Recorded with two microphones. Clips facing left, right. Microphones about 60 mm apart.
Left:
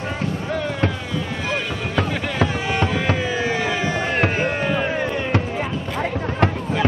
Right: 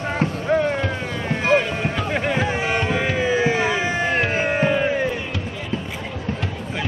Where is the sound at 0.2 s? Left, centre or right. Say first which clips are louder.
Right 7 dB; right.